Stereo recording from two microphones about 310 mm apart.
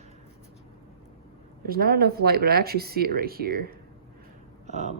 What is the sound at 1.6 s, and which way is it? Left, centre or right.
Speech, right.